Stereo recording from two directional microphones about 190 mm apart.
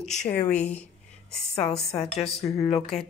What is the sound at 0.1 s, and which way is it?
Speech, 40° left (ahead or behind).